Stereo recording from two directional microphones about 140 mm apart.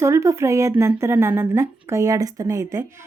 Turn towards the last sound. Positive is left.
turn(degrees=-20)  # may be behind; listen again after turning